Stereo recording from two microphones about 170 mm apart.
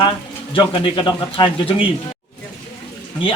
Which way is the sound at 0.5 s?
30° left (ahead or behind).